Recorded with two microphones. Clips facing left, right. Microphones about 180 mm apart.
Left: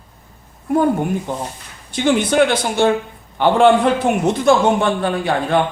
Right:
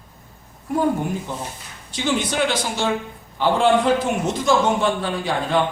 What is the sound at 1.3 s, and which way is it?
A man's voice, 55° left (ahead or behind).